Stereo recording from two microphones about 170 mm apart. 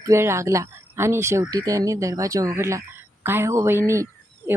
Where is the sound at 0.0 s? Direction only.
15° right (ahead or behind).